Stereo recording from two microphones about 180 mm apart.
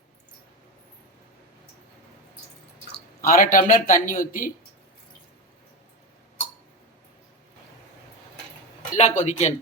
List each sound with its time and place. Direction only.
3.2 s a man's voice: 50° left (ahead or behind)
9.0 s speech: 40° left (ahead or behind)